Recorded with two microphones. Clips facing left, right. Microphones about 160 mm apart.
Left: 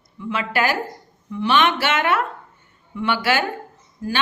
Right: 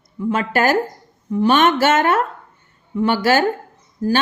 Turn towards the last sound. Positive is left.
turn(degrees=-40)  # may be behind; listen again after turning